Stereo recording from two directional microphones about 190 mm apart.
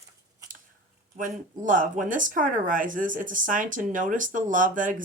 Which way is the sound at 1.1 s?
45° right (ahead or behind).